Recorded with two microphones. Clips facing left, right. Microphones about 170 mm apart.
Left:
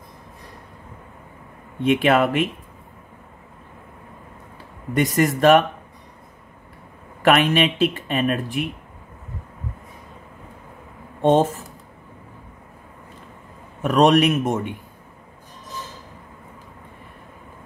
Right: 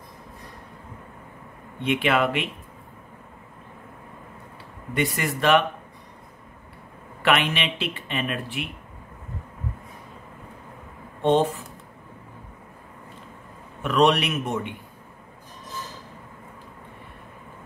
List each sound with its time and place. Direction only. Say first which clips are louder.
1.8 s speech: left 5 dB; 45° left (ahead or behind)
4.9 s speech: left 7 dB; 45° left (ahead or behind)
7.2 s speech: left 6 dB; 45° left (ahead or behind)
11.2 s speech: left 3 dB; 40° left (ahead or behind)
13.8 s speech: left 5 dB; 45° left (ahead or behind)